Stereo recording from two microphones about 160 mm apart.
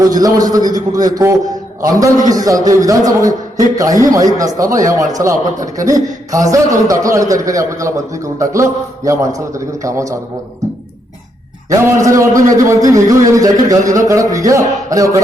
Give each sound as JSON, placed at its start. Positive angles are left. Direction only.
{"t": 0.0, "sound": "a man's voice", "side_deg": -20}
{"t": 11.7, "sound": "a man's voice", "side_deg": -20}